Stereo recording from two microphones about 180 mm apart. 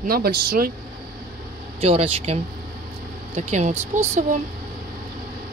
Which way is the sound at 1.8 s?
35° right (ahead or behind).